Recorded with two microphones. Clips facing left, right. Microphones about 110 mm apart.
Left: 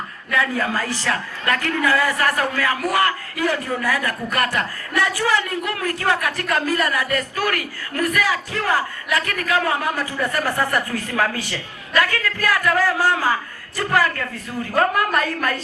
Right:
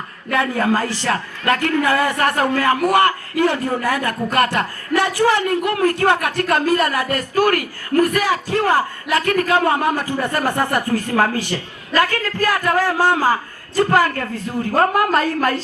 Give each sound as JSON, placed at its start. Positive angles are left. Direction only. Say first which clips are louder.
{"t": 0.3, "sound": "a man's voice", "louder": "right 4 dB", "side_deg": -45}
{"t": 2.0, "sound": "a man's voice", "louder": "right 3 dB", "side_deg": -25}
{"t": 5.3, "sound": "speech", "louder": "right 4 dB", "side_deg": -50}
{"t": 5.7, "sound": "a man's voice", "louder": "right 8 dB", "side_deg": -35}
{"t": 6.1, "sound": "a man's voice", "louder": "right 4 dB", "side_deg": -50}
{"t": 10.8, "sound": "a man's voice", "louder": "right 5 dB", "side_deg": -40}